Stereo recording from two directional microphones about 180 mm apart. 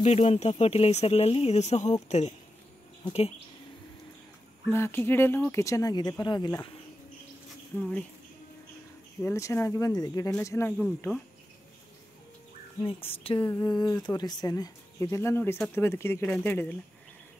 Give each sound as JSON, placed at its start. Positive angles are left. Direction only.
{"t": 0.0, "sound": "speech", "side_deg": 35}
{"t": 4.6, "sound": "speech", "side_deg": 10}
{"t": 7.7, "sound": "speech", "side_deg": 10}
{"t": 9.2, "sound": "speech", "side_deg": 15}
{"t": 12.8, "sound": "speech", "side_deg": 30}